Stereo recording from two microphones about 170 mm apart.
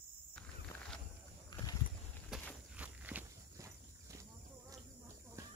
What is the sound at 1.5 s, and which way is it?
Boat, 25° left (ahead or behind).